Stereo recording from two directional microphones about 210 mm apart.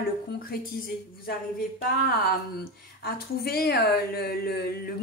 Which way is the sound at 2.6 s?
45° left (ahead or behind).